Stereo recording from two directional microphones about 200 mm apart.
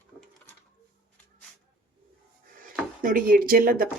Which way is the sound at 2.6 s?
45° right (ahead or behind).